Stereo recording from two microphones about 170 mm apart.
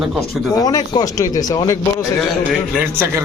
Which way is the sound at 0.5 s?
20° left (ahead or behind).